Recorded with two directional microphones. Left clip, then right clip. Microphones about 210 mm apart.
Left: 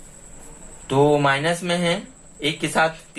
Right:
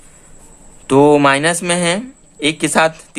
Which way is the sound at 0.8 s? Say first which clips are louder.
Right 7 dB; 45° right (ahead or behind).